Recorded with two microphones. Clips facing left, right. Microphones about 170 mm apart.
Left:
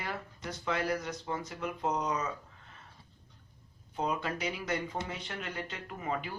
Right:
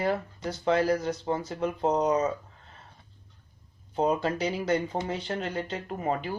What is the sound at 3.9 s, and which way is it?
Speech, 35° right (ahead or behind).